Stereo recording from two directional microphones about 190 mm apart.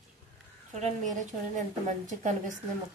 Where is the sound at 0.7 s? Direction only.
35° right (ahead or behind).